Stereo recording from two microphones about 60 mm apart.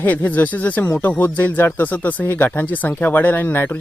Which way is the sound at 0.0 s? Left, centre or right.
Left.